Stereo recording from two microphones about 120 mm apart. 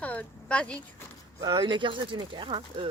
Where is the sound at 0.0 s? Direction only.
10° left (ahead or behind).